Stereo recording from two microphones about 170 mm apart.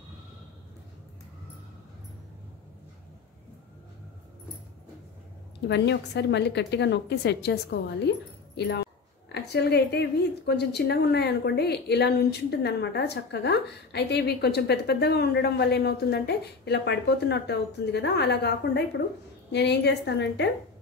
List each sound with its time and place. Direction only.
5.7 s a woman's voice: 85° left